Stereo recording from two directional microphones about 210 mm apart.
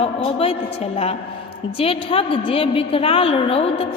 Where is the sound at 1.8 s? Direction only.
25° left (ahead or behind).